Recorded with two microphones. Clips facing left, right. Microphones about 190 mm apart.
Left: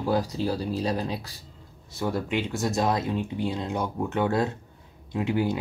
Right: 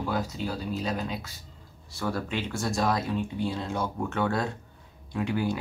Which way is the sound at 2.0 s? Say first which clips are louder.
Left 3 dB; 20° left (ahead or behind).